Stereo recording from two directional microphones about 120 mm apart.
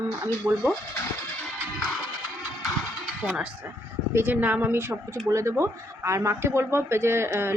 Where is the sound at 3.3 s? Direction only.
10° right (ahead or behind).